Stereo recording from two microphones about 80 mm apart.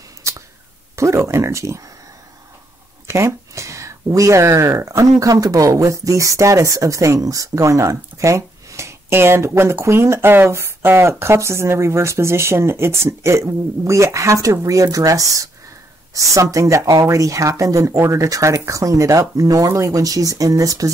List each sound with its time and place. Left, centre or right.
0.9 s speech: right
3.1 s speech: right